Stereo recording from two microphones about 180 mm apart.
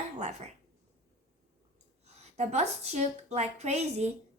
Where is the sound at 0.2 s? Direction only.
40° right (ahead or behind).